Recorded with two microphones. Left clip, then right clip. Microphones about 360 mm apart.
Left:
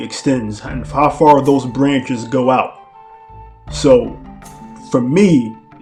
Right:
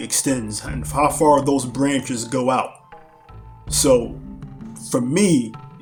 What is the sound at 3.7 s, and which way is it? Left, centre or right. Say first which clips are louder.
Speech: left 6 dB; right.